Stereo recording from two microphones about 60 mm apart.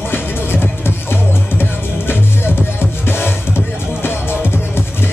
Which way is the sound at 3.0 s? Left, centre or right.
Left.